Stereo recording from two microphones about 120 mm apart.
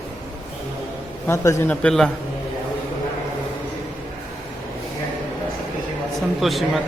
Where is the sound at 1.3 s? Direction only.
20° left (ahead or behind).